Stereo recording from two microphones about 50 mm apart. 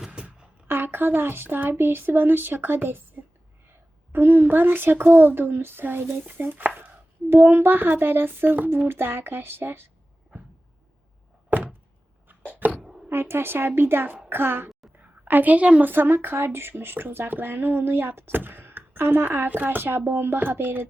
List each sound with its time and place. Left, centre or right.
0.1 s a sound: right
0.7 s speech: right
1.8 s speech: right
4.1 s speech: right
11.4 s a sound: right
13.1 s a child's voice: right
15.2 s a woman's voice: right
15.8 s speech: right